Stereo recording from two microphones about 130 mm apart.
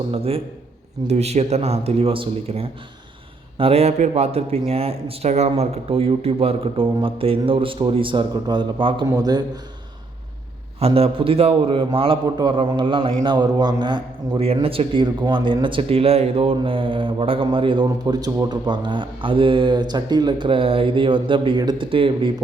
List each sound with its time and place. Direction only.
0.1 s speech: 45° right (ahead or behind); by 9.4 s 30° right (ahead or behind)
10.8 s speech: 50° right (ahead or behind)
17.8 s speech: 30° right (ahead or behind)